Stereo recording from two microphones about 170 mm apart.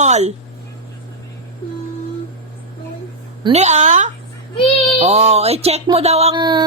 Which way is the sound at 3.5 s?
40° right (ahead or behind).